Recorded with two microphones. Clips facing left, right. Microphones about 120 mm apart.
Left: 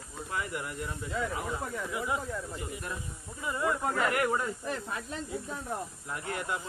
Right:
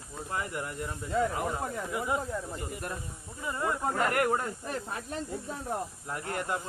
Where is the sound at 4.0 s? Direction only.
45° right (ahead or behind).